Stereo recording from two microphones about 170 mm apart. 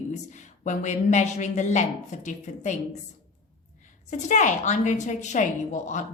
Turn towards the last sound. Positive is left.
turn(degrees=45)  # may be behind; listen again after turning